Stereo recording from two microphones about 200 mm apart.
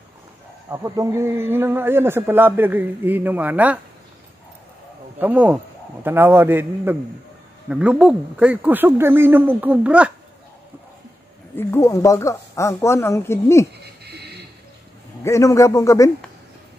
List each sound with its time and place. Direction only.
0.7 s a man's voice: 15° right (ahead or behind)
5.2 s a man's voice: 10° right (ahead or behind)
11.5 s speech: 15° left (ahead or behind)
14.0 s a sound: 55° right (ahead or behind)
15.2 s speech: 15° left (ahead or behind)